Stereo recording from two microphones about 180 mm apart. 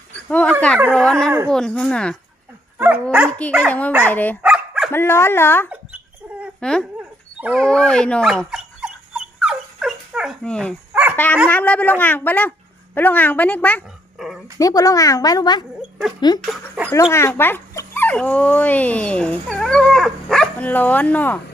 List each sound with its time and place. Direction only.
0.3 s a sound: 5° left (ahead or behind)
0.9 s speech: 5° left (ahead or behind)
2.7 s dog: 10° right (ahead or behind)
3.1 s speech: 5° right (ahead or behind)
3.6 s speech: 10° left (ahead or behind)
4.4 s dog: 5° right (ahead or behind)
4.9 s speech: 15° left (ahead or behind)
7.4 s dog: 5° left (ahead or behind)
10.9 s dog: 10° right (ahead or behind)
11.4 s speech: 10° left (ahead or behind)
14.6 s a woman's voice: 20° left (ahead or behind)
16.5 s speech: 5° right (ahead or behind)
16.9 s speech: 15° left (ahead or behind)